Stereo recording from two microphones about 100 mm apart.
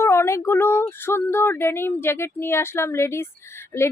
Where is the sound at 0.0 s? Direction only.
25° left (ahead or behind).